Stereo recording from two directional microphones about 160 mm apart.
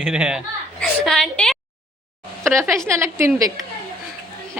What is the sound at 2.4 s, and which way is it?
A woman's voice, 15° right (ahead or behind).